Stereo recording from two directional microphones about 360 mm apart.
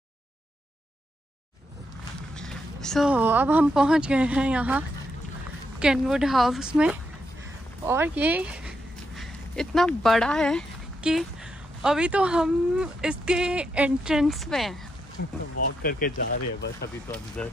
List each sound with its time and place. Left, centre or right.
2.3 s speech: centre
15.8 s speech: left
17.4 s speech: centre